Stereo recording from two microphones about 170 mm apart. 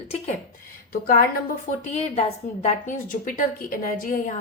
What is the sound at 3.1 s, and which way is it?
A woman's voice, 55° left (ahead or behind).